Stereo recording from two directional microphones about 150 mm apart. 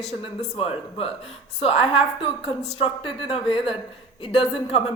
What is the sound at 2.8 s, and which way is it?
A man's voice, 40° left (ahead or behind).